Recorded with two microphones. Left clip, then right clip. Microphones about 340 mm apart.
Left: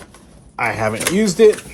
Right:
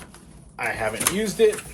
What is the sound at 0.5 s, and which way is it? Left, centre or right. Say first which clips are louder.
Speech: left 7 dB; left.